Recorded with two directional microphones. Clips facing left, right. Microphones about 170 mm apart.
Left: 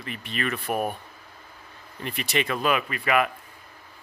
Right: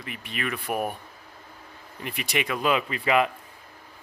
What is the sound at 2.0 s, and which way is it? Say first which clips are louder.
Speech: left 2 dB; 10° right (ahead or behind).